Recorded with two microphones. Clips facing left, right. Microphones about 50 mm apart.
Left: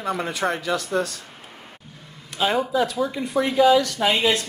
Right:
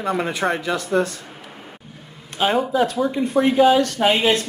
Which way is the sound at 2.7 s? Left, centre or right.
Right.